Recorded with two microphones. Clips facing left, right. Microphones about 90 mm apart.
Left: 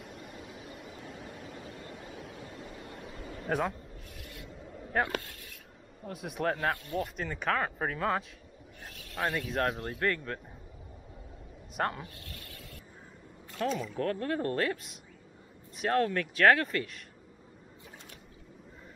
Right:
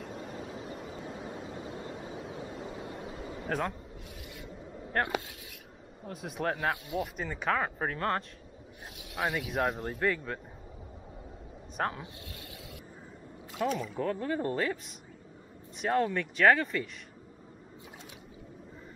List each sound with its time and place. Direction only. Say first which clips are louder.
0.1 s a sound: right 5 dB; 35° right (ahead or behind)
0.9 s vehicle: right 5 dB; 30° right (ahead or behind)
3.4 s speech: left 2 dB; 5° left (ahead or behind)
4.2 s a sound: right 1 dB; centre (ahead or behind)
5.0 s speech: right 1 dB; 15° right (ahead or behind)
6.0 s speech: left 1 dB; centre (ahead or behind)
8.9 s speech: even; 10° right (ahead or behind)
11.7 s speech: left 1 dB; centre (ahead or behind)
12.0 s speech: right 1 dB; 15° right (ahead or behind)
13.5 s speech: right 1 dB; 5° right (ahead or behind)